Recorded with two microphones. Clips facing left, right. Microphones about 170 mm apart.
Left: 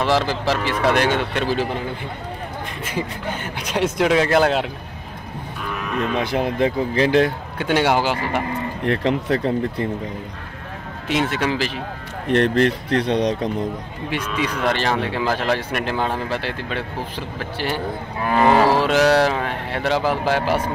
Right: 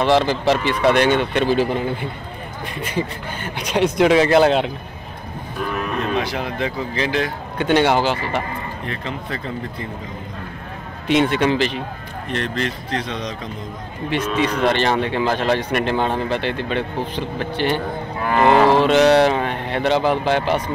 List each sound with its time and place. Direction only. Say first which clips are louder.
0.0 s speech: right 3 dB; 5° left (ahead or behind)
2.8 s speech: right 3 dB; 5° left (ahead or behind)
6.2 s speech: left 4 dB; 50° left (ahead or behind)
7.5 s speech: right 3 dB; 10° left (ahead or behind)
8.8 s speech: left 12 dB; 70° left (ahead or behind)
11.1 s speech: right 4 dB; 5° left (ahead or behind)
12.3 s speech: left 8 dB; 55° left (ahead or behind)
14.7 s speech: right 3 dB; 5° left (ahead or behind)